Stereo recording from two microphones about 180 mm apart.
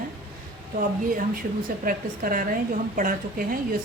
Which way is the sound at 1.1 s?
50° right (ahead or behind).